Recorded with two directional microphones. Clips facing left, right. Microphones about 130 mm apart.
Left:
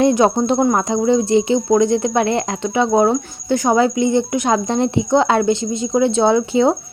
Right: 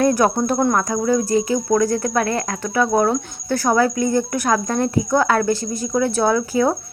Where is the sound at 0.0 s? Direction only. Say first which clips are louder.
Left 3 dB; 20° left (ahead or behind).